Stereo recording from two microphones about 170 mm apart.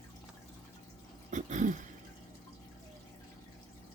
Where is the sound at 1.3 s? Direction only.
45° right (ahead or behind).